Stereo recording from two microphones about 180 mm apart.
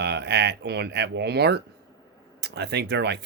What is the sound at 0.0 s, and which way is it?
Speech, 65° right (ahead or behind).